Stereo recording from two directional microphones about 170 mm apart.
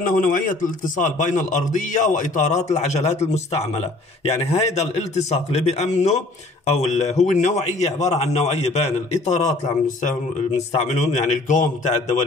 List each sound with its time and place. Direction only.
0.1 s a man's voice: 55° left (ahead or behind)